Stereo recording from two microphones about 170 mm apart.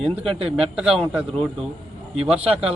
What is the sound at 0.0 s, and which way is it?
Speech, 35° right (ahead or behind).